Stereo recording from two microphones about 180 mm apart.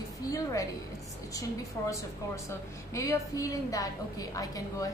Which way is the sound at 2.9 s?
15° left (ahead or behind).